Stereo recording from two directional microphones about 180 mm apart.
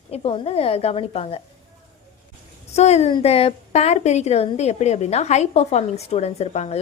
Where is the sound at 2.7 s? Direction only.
35° left (ahead or behind).